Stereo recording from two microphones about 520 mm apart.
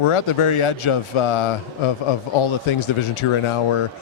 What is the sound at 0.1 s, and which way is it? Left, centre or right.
A man's voice, left.